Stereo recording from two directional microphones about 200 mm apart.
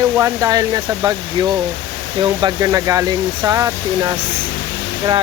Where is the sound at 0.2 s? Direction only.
15° right (ahead or behind).